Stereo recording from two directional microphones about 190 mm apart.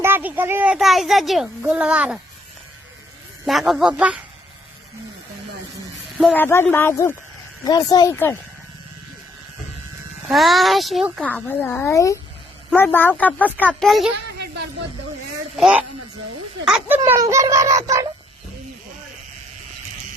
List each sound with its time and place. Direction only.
0.0 s a child's voice: 10° right (ahead or behind)
3.4 s a child's voice: centre (ahead or behind)
6.1 s speech: 5° left (ahead or behind)
10.2 s a child's voice: centre (ahead or behind)
15.5 s a child's voice: centre (ahead or behind)
17.0 s speech: 15° right (ahead or behind)